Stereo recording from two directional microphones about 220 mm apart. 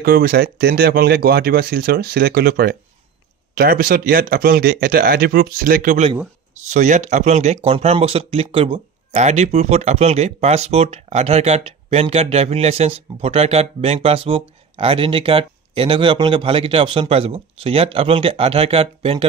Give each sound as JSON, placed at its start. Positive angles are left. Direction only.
{"t": 0.0, "sound": "speech", "side_deg": -45}